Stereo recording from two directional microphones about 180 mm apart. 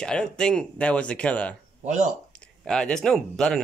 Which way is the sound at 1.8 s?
40° right (ahead or behind).